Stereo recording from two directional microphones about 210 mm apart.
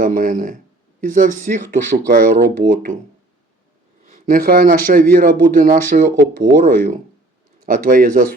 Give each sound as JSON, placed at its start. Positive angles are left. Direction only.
{"t": 0.0, "sound": "speech", "side_deg": -40}
{"t": 4.0, "sound": "speech", "side_deg": -40}
{"t": 7.6, "sound": "speech", "side_deg": -40}